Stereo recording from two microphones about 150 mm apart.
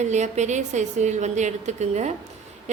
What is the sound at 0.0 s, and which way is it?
A woman's voice, 50° right (ahead or behind).